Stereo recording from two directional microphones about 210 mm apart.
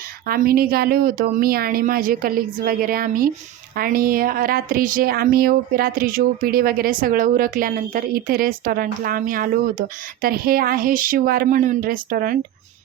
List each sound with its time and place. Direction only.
0.3 s speech: 45° right (ahead or behind)